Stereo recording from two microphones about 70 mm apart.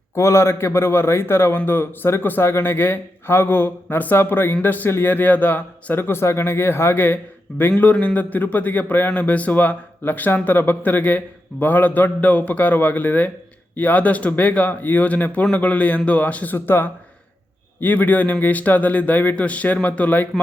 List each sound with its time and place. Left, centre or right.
0.2 s a man's voice: left